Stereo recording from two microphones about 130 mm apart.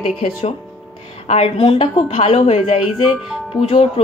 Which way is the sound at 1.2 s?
55° left (ahead or behind).